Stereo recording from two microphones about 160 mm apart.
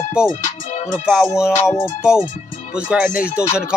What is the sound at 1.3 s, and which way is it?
Music, 5° right (ahead or behind).